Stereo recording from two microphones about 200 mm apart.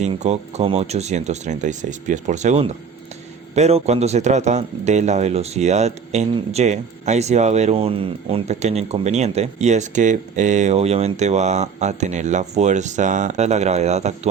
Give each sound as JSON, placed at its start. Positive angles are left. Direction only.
{"t": 0.0, "sound": "a man's voice", "side_deg": -35}